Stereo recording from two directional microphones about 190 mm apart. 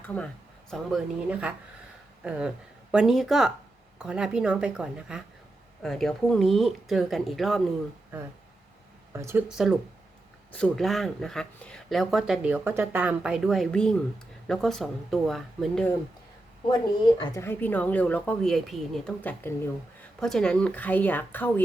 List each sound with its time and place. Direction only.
0.0 s speech: 10° left (ahead or behind)
2.9 s speech: 5° right (ahead or behind)
9.1 s speech: 10° right (ahead or behind)
17.1 s speech: 20° left (ahead or behind)
17.4 s speech: 10° left (ahead or behind)